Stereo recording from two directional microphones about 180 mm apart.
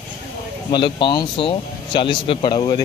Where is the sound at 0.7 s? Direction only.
25° left (ahead or behind).